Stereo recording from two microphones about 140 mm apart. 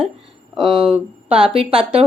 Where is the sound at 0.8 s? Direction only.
5° right (ahead or behind).